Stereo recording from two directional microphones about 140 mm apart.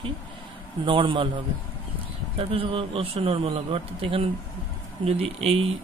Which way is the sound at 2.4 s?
40° right (ahead or behind).